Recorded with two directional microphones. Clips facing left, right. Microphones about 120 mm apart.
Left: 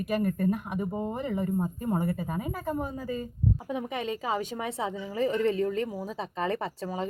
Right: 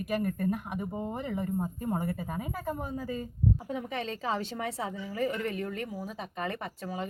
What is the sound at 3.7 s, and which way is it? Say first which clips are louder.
A woman's voice: left 3 dB; 15° left (ahead or behind).